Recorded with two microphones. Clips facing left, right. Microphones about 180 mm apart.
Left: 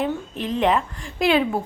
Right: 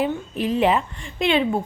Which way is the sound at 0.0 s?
5° right (ahead or behind).